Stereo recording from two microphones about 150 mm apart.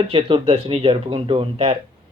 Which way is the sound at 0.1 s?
35° right (ahead or behind).